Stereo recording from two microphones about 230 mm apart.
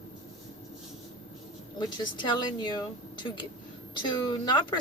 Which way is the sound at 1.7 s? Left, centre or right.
Centre.